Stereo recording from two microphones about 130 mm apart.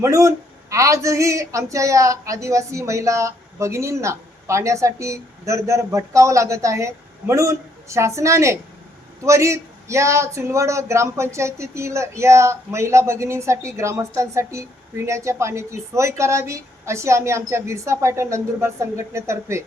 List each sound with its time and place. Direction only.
0.0 s speech: 25° right (ahead or behind)